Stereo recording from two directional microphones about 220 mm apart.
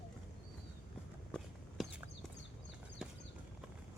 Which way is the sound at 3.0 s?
Centre (ahead or behind).